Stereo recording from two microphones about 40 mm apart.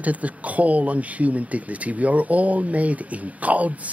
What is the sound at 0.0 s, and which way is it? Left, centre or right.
Speech, right.